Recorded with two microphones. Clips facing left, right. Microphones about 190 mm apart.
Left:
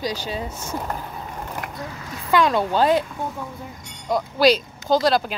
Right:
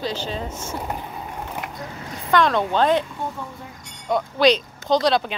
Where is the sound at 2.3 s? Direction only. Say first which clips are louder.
Even; 5° left (ahead or behind).